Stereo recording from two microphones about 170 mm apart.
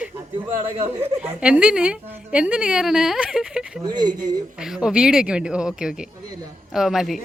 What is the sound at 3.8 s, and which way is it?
Speech, 25° right (ahead or behind).